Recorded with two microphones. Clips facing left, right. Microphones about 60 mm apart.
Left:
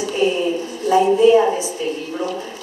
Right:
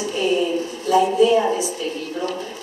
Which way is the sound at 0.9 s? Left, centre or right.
Left.